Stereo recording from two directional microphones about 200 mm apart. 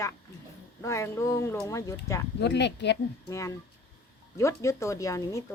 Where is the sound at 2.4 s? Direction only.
60° left (ahead or behind).